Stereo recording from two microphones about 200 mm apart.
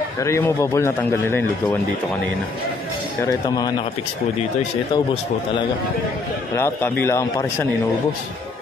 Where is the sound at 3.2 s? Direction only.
15° left (ahead or behind).